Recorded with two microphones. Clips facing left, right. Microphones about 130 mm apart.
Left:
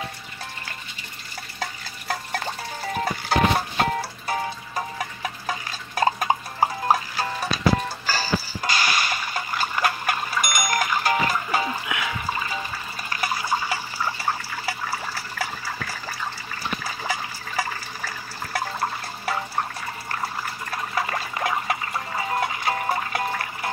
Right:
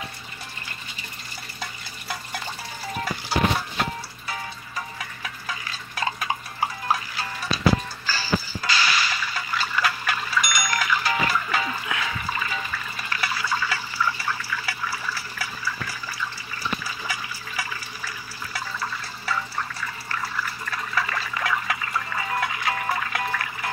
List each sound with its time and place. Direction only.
1.6 s stir: 45° left (ahead or behind)
3.3 s music: 45° left (ahead or behind)
8.1 s a sound: 45° left (ahead or behind)
11.7 s music: 15° left (ahead or behind)
12.4 s water: 40° left (ahead or behind)